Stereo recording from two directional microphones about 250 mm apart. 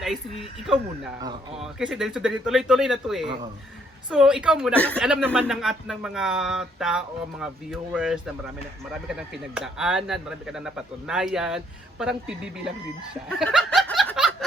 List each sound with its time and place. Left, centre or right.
0.0 s speech: centre
1.2 s speech: centre
1.6 s speech: centre
4.9 s speech: centre
13.2 s snicker: centre